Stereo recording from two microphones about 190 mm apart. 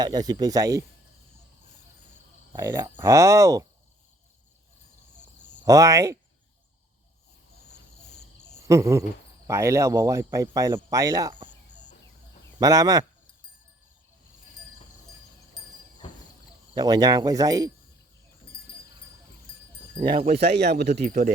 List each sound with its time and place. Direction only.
0.0 s speech: 20° right (ahead or behind)
2.5 s speech: 15° right (ahead or behind)
5.6 s speech: 15° right (ahead or behind)
7.7 s cricket: 60° left (ahead or behind)
8.6 s cricket: 15° right (ahead or behind)
9.5 s speech: 15° right (ahead or behind)
12.5 s speech: 20° right (ahead or behind)
16.7 s speech: 20° right (ahead or behind)
20.0 s speech: 25° right (ahead or behind)
20.4 s speech: 60° right (ahead or behind)
21.0 s speech: 40° right (ahead or behind)